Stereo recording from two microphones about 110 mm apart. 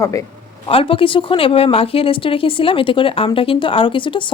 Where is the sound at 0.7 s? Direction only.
55° left (ahead or behind).